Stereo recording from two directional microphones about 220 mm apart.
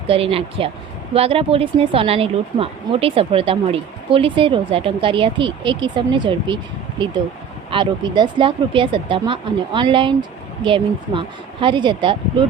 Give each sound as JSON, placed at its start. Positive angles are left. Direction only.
{"t": 0.1, "sound": "speech", "side_deg": -25}
{"t": 7.7, "sound": "speech", "side_deg": -20}